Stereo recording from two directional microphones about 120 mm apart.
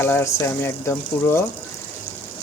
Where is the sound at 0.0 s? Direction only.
20° left (ahead or behind).